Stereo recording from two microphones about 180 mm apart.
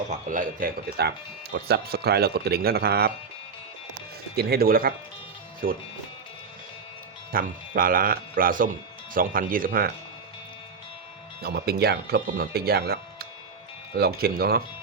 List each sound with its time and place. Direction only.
0.1 s speech: 45° right (ahead or behind)
4.4 s speech: 60° right (ahead or behind)
7.3 s speech: 50° right (ahead or behind)
11.4 s speech: 60° right (ahead or behind)